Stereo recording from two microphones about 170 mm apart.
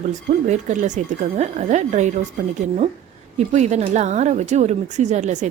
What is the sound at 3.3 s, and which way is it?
A woman's voice, 45° right (ahead or behind).